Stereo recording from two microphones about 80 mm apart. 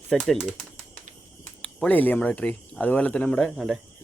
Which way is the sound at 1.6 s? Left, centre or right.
Centre.